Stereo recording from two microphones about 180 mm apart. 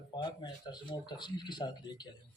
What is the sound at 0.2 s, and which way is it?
Speech, 25° left (ahead or behind).